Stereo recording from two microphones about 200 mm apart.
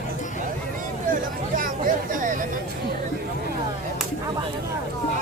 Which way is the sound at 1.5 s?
40° right (ahead or behind).